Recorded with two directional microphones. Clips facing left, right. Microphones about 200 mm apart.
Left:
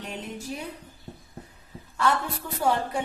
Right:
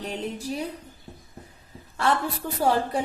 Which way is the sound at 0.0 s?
35° right (ahead or behind).